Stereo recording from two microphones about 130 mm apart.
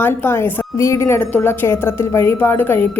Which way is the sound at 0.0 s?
15° left (ahead or behind).